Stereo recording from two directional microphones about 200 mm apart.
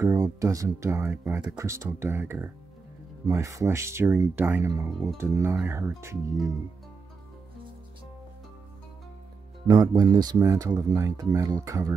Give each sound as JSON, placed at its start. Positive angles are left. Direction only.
{"t": 0.0, "sound": "speech", "side_deg": -15}
{"t": 9.7, "sound": "speech", "side_deg": -20}